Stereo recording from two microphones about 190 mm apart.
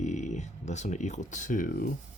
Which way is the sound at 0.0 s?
40° left (ahead or behind).